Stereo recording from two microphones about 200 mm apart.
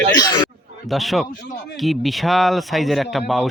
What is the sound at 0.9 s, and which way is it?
Speech, centre (ahead or behind).